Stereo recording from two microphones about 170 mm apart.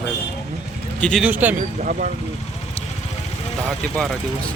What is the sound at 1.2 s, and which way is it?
Speech, 10° right (ahead or behind).